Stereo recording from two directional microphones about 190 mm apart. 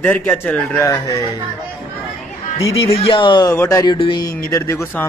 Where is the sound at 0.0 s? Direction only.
10° left (ahead or behind).